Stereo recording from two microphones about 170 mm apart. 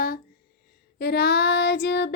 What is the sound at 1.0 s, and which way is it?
Child singing, 75° left (ahead or behind).